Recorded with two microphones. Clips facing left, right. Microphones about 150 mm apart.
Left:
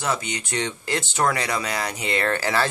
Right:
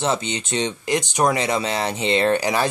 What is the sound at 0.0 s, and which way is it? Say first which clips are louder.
Speech: right 4 dB; 25° right (ahead or behind).